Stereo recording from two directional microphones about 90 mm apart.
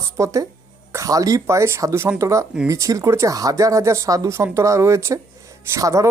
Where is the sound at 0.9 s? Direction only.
40° right (ahead or behind).